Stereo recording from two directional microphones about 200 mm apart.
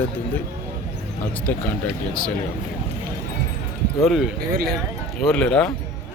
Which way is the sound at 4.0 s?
Centre (ahead or behind).